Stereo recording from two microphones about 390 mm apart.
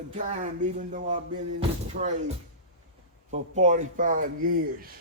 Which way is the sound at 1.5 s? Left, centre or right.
Centre.